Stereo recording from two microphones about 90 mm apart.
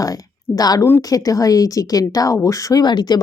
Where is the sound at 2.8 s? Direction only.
55° left (ahead or behind).